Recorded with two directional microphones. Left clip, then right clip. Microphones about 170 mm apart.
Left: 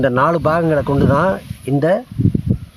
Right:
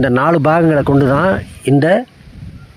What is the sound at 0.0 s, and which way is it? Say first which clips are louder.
Speech: right 2 dB; 25° right (ahead or behind).